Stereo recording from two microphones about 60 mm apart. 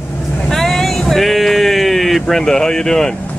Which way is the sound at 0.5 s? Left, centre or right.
Centre.